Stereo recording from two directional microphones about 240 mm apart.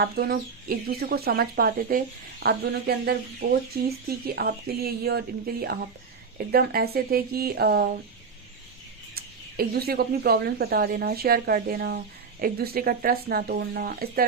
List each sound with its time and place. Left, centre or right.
0.0 s speech: right
4.4 s speech: right
9.1 s speech: right